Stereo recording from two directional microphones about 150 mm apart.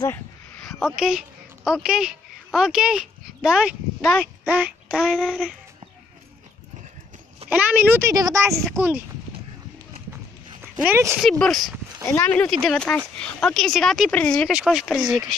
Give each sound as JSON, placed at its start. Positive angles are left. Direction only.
{"t": 0.0, "sound": "a sound", "side_deg": 15}
{"t": 0.7, "sound": "speech", "side_deg": 0}
{"t": 7.4, "sound": "a woman's voice", "side_deg": -10}
{"t": 10.6, "sound": "speech", "side_deg": -15}
{"t": 11.1, "sound": "speech", "side_deg": 5}
{"t": 12.1, "sound": "speech", "side_deg": 15}
{"t": 14.5, "sound": "speech", "side_deg": -5}